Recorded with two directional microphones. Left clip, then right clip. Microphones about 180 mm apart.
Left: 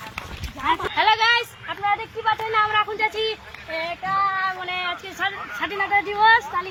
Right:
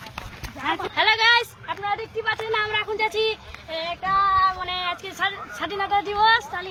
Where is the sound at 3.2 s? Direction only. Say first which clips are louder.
Right 1 dB; 30° right (ahead or behind).